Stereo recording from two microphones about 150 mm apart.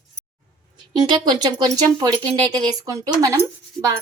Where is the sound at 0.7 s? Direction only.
30° right (ahead or behind).